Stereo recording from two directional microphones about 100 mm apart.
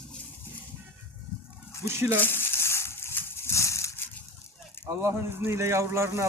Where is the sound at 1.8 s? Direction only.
25° right (ahead or behind).